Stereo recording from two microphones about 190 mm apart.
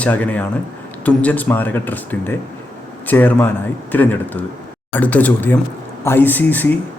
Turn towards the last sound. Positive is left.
turn(degrees=10)  # may be behind; listen again after turning